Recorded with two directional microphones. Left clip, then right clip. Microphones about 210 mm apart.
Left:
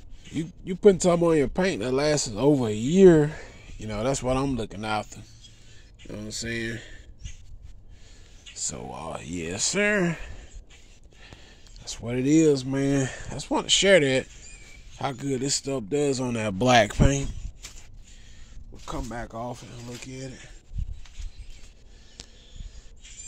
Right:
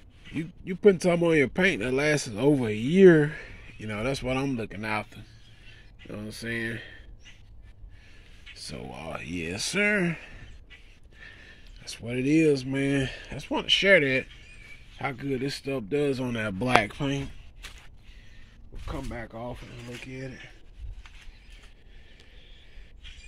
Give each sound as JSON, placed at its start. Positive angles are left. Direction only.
{"t": 0.4, "sound": "speech", "side_deg": 5}
{"t": 8.5, "sound": "speech", "side_deg": 0}
{"t": 11.8, "sound": "speech", "side_deg": 5}
{"t": 16.8, "sound": "speech", "side_deg": 25}
{"t": 18.9, "sound": "speech", "side_deg": 5}